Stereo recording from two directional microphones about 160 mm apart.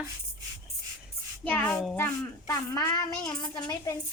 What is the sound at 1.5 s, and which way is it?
Speech, 10° left (ahead or behind).